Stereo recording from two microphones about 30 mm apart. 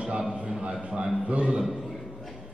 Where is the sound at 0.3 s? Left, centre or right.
Right.